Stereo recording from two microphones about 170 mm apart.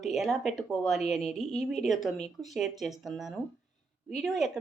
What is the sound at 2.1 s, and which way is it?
Speech, 40° left (ahead or behind).